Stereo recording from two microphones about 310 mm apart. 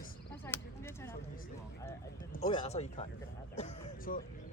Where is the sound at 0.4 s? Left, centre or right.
Centre.